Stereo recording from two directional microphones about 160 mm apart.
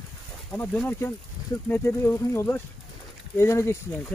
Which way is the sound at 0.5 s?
10° left (ahead or behind).